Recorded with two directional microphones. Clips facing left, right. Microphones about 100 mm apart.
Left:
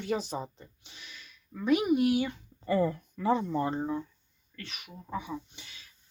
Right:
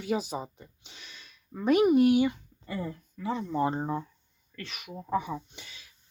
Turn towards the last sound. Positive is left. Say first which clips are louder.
# right 7 dB
turn(degrees=-90)